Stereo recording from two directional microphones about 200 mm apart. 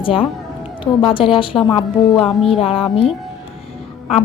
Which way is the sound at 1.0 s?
25° left (ahead or behind).